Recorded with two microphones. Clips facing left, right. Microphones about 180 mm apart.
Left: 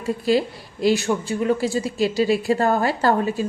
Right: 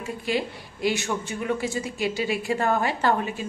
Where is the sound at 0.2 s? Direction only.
35° left (ahead or behind).